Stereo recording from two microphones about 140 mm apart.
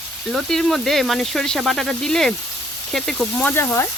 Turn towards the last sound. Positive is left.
turn(degrees=15)  # may be behind; listen again after turning